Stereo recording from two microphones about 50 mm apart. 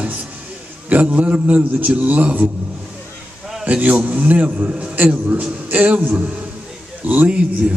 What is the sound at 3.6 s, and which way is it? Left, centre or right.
A man's voice, right.